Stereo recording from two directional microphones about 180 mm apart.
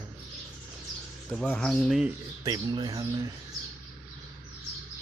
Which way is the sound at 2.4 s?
20° right (ahead or behind).